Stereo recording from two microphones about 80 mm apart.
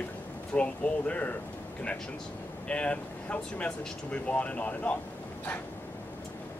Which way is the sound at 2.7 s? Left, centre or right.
Centre.